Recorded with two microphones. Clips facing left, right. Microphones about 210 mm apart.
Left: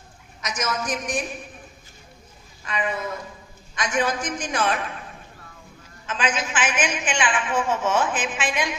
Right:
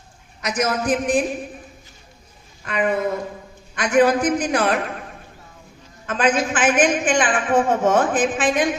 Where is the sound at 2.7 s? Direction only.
55° right (ahead or behind).